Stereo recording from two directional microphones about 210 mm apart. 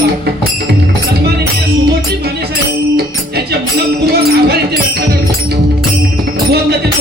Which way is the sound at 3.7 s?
50° right (ahead or behind).